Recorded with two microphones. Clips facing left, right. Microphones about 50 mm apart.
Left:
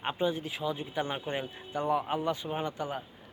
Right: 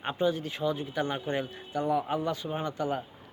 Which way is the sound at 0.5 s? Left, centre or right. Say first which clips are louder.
Right 3 dB; centre.